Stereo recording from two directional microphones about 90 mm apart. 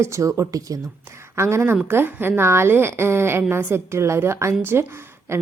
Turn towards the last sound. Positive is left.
turn(degrees=-30)  # may be behind; listen again after turning